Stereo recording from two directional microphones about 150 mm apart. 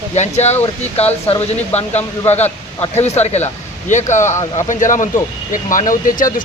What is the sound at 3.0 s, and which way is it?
Speech, 45° left (ahead or behind).